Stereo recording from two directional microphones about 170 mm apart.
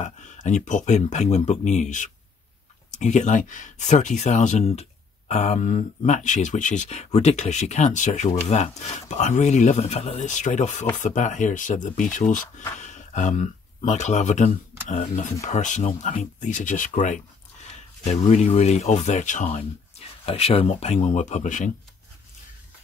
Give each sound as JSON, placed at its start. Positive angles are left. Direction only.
{"t": 0.0, "sound": "speech", "side_deg": 45}